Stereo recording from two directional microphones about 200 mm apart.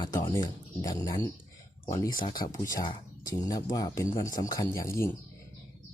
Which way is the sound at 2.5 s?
20° left (ahead or behind).